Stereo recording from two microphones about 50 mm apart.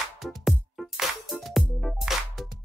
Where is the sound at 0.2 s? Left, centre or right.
Centre.